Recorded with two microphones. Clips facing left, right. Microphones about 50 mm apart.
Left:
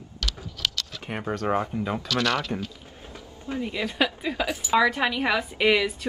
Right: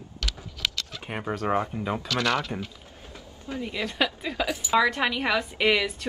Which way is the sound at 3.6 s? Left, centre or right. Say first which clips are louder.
Left 1 dB; centre.